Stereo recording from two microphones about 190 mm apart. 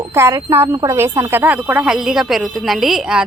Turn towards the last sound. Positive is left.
turn(degrees=-5)  # may be behind; listen again after turning